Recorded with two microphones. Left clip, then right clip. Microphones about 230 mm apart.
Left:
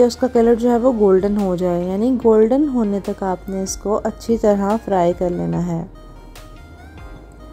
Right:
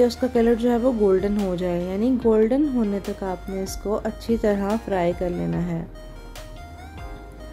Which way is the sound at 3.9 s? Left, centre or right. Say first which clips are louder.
Left 6 dB; centre.